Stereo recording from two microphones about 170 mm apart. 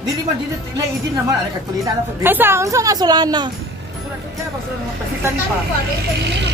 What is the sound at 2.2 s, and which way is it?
A woman's voice, 15° right (ahead or behind).